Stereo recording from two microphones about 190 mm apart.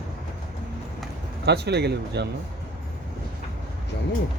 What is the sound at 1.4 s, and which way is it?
Speech, 60° right (ahead or behind).